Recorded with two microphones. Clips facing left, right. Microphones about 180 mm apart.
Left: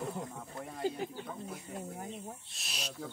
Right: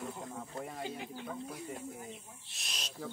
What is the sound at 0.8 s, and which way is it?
Speech, 40° left (ahead or behind).